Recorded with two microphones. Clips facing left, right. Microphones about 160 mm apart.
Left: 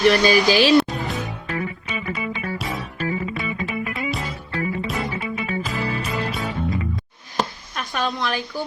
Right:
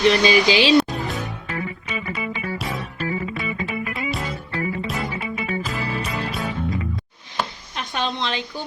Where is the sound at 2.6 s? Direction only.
Centre (ahead or behind).